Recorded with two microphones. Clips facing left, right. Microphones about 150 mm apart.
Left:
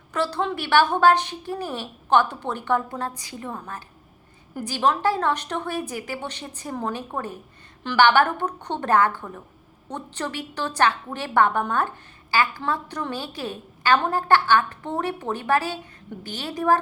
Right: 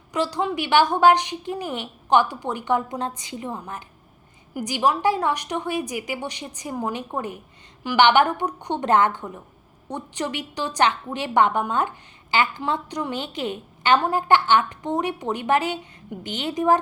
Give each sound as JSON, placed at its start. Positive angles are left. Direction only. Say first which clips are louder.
{"t": 0.1, "sound": "a woman's voice", "louder": "right 1 dB", "side_deg": -15}